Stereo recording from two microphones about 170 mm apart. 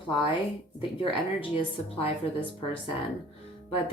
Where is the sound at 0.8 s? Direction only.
30° left (ahead or behind).